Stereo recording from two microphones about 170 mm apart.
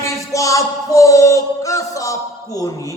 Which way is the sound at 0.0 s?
20° left (ahead or behind).